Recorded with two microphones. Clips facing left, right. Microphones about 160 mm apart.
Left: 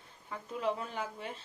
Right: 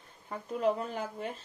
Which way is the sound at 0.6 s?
45° right (ahead or behind).